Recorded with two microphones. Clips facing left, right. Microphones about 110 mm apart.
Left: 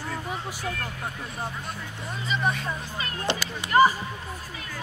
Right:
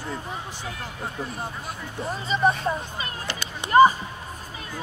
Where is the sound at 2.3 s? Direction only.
35° right (ahead or behind).